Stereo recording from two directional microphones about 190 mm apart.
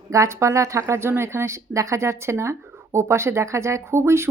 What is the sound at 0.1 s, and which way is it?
Speech, 15° right (ahead or behind).